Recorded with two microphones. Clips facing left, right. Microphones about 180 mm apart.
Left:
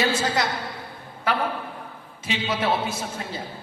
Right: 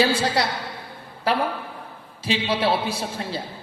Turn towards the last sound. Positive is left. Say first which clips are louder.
# right 3 dB
turn(degrees=-30)  # may be behind; listen again after turning